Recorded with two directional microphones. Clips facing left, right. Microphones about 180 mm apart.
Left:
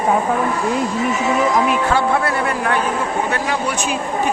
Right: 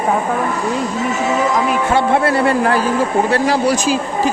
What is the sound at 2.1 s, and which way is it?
Speech, 30° right (ahead or behind).